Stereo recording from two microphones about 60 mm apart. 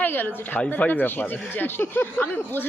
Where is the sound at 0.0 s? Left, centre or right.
Left.